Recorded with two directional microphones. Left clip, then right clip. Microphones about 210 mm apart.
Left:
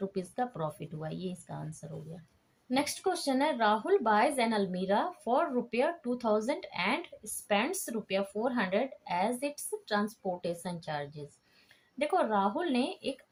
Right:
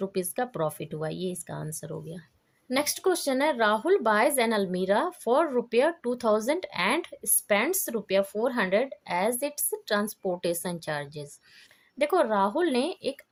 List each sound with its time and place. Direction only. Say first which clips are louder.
0.0 s speech: right 5 dB; 50° right (ahead or behind)